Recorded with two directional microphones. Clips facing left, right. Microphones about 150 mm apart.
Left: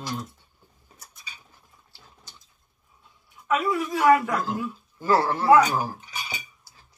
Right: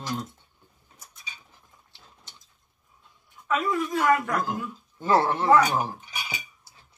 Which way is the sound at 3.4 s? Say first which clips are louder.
Left 1 dB; 5° left (ahead or behind).